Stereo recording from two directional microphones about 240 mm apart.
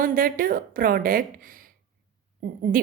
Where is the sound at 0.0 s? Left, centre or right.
Right.